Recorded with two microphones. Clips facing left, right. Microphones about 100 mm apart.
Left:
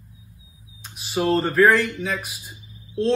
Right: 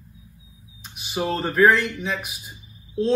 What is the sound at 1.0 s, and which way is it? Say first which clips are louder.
Speech: left 4 dB; centre (ahead or behind).